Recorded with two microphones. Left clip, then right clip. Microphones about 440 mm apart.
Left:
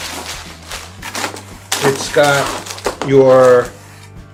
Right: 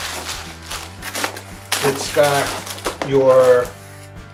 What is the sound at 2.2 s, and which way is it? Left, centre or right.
Speech, left.